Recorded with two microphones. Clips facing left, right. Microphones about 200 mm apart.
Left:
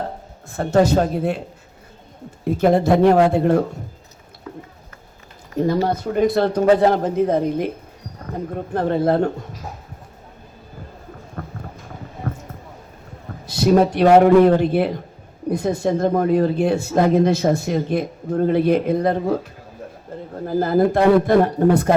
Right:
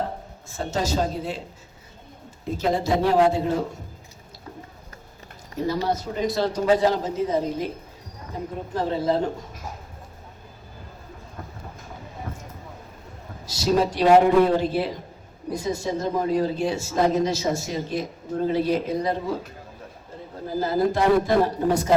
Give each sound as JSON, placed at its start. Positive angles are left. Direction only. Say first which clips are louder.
{"t": 0.5, "sound": "a man's voice", "louder": "left 9 dB", "side_deg": 60}
{"t": 2.6, "sound": "a man's voice", "louder": "left 8 dB", "side_deg": 60}
{"t": 5.6, "sound": "a man's voice", "louder": "left 5 dB", "side_deg": 55}
{"t": 11.4, "sound": "clip-clop", "louder": "left 7 dB", "side_deg": 60}
{"t": 12.3, "sound": "a sound", "louder": "left 10 dB", "side_deg": 60}
{"t": 13.5, "sound": "a man's voice", "louder": "left 6 dB", "side_deg": 60}
{"t": 20.1, "sound": "bird", "louder": "left 7 dB", "side_deg": 60}
{"t": 20.5, "sound": "a man's voice", "louder": "left 5 dB", "side_deg": 55}